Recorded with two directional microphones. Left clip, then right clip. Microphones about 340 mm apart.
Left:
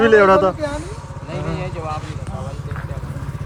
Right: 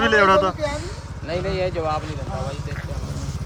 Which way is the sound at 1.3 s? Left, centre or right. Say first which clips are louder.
Right 4 dB; right.